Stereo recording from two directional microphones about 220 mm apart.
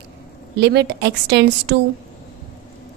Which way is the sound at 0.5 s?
50° right (ahead or behind).